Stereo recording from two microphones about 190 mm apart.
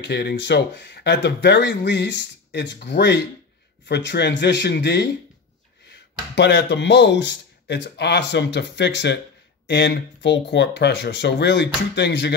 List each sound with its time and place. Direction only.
0.0 s speech: 60° left (ahead or behind)